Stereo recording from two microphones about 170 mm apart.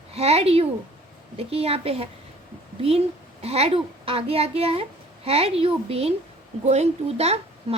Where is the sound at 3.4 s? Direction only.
35° right (ahead or behind).